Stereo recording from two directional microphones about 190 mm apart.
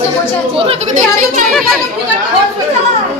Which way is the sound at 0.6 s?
35° right (ahead or behind).